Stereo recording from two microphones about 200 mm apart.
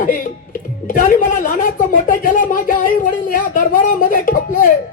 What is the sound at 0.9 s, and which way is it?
Speech, 40° left (ahead or behind).